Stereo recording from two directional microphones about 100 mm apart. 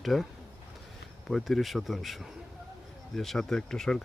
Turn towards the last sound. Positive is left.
turn(degrees=5)  # may be behind; listen again after turning